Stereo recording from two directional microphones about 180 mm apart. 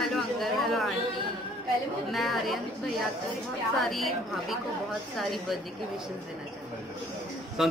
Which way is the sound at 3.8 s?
Centre (ahead or behind).